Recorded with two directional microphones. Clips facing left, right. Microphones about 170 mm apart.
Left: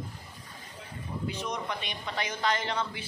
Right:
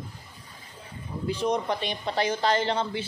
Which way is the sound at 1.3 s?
35° right (ahead or behind).